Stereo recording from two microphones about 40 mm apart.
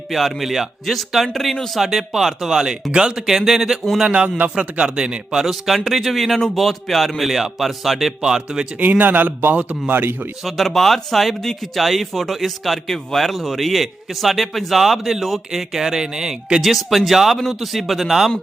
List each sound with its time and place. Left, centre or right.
0.1 s a man's voice: centre
1.8 s a man's voice: centre
3.2 s speech: centre
4.1 s a man's voice: right
5.3 s a man's voice: centre
8.8 s speech: right
9.6 s a man's voice: right
10.8 s a man's voice: centre